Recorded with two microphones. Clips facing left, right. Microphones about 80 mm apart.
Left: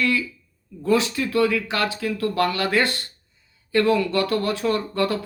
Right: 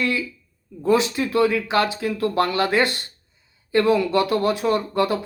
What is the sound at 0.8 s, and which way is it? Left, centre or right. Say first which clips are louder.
Speech: right 2 dB; right.